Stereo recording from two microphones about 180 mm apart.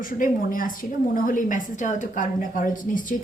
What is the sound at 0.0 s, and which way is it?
A woman's voice, 50° left (ahead or behind).